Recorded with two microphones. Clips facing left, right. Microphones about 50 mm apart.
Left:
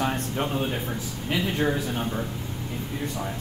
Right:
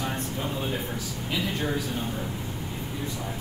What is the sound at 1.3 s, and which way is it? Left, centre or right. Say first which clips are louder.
Speech: left 4 dB; left.